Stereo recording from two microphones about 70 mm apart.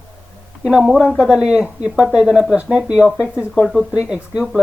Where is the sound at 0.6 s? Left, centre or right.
Centre.